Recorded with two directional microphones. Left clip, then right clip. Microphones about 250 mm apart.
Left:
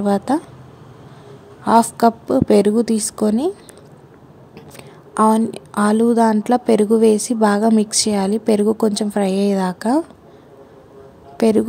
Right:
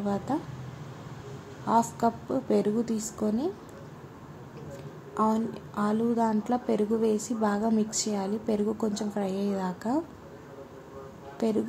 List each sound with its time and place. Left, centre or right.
0.0 s a woman's voice: left
1.7 s a woman's voice: left
4.7 s a woman's voice: left
11.3 s a woman's voice: left